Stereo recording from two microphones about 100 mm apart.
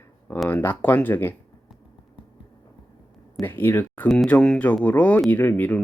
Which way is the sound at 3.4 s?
20° left (ahead or behind).